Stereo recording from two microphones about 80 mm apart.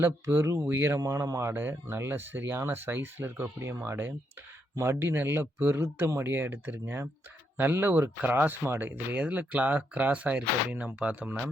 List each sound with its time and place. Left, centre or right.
0.0 s speech: right
0.9 s speech: right; by 11.3 s centre